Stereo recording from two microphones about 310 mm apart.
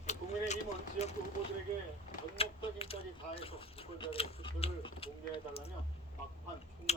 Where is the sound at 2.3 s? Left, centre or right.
Centre.